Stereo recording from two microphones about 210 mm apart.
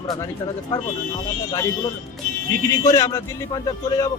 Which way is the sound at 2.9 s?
15° left (ahead or behind).